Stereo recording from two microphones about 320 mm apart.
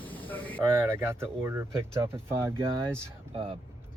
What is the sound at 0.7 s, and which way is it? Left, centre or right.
Speech, centre.